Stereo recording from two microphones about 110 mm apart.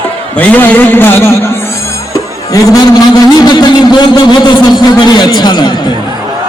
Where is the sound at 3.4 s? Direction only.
40° left (ahead or behind).